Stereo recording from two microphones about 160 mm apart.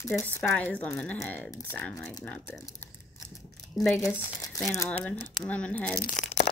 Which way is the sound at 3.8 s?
Centre (ahead or behind).